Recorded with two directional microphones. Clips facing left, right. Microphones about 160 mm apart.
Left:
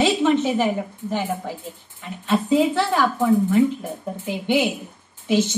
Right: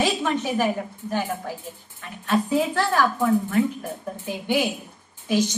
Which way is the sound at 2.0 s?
15° left (ahead or behind).